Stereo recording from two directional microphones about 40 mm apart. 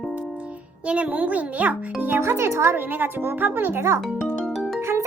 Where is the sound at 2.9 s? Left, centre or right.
Right.